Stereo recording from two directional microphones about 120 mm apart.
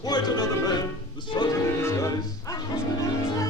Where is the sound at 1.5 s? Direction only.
25° left (ahead or behind).